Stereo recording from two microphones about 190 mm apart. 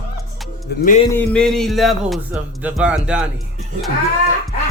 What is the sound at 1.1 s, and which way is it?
Speech, 5° left (ahead or behind).